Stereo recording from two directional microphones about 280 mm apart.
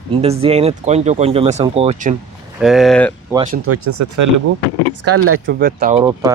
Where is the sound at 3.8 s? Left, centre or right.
Right.